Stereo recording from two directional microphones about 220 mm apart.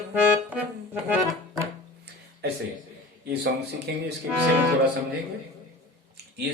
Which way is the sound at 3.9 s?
50° right (ahead or behind).